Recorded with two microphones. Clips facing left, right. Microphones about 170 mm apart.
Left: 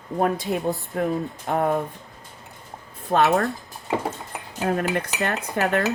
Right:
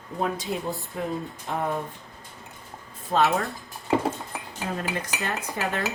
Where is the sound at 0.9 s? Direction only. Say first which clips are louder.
Left 6 dB; 55° left (ahead or behind).